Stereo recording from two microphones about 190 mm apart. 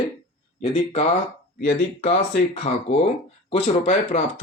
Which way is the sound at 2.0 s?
35° left (ahead or behind).